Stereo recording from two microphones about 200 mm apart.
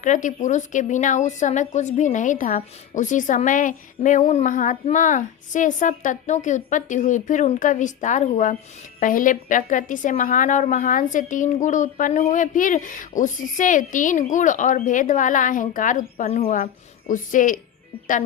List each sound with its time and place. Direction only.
0.0 s a woman's voice: 40° left (ahead or behind)